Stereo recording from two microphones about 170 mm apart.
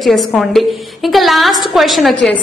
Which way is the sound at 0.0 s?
Centre (ahead or behind).